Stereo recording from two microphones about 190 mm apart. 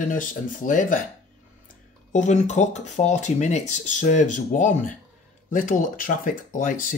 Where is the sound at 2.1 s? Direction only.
40° left (ahead or behind).